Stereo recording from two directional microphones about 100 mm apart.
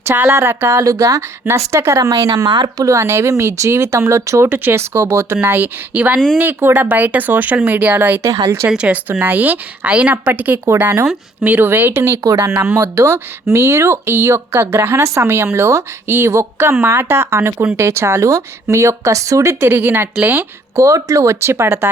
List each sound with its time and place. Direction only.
0.1 s speech: 25° right (ahead or behind)
4.4 s a woman's voice: 20° right (ahead or behind)
20.8 s speech: 30° right (ahead or behind)